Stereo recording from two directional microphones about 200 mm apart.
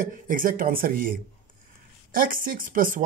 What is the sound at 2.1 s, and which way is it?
Speech, 45° right (ahead or behind).